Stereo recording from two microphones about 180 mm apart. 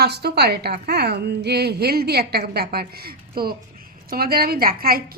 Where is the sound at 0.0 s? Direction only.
65° right (ahead or behind).